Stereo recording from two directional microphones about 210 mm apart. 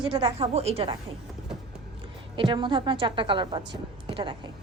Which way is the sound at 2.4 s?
25° right (ahead or behind).